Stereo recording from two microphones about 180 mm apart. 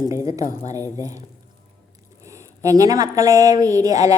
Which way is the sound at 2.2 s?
15° right (ahead or behind).